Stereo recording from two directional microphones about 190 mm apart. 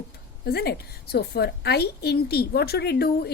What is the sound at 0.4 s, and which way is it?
A woman's voice, 55° left (ahead or behind).